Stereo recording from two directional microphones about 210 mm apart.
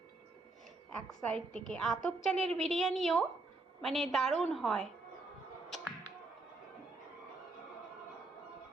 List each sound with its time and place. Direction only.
1.2 s a woman's voice: 5° left (ahead or behind)